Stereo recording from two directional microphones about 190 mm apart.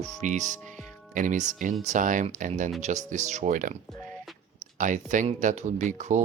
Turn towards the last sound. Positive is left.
turn(degrees=-40)  # may be behind; listen again after turning